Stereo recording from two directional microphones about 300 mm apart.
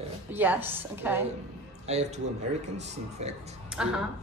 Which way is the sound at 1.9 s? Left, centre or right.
Right.